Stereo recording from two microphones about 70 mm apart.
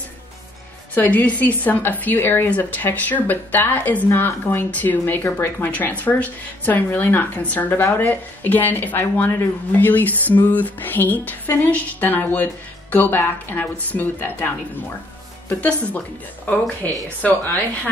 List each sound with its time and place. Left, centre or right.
0.9 s speech: left